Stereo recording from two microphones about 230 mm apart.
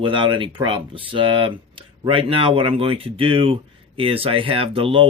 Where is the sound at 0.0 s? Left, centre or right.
Right.